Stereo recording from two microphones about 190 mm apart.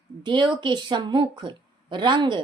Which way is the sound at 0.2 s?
25° right (ahead or behind).